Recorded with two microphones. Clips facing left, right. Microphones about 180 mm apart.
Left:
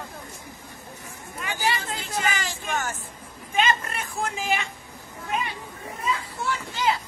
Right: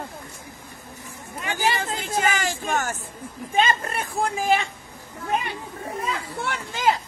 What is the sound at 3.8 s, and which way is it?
Speech, 35° right (ahead or behind).